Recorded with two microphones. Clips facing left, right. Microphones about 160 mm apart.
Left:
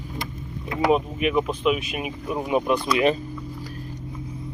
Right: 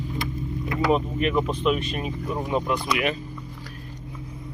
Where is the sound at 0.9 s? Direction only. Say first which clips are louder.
Left 2 dB; 5° left (ahead or behind).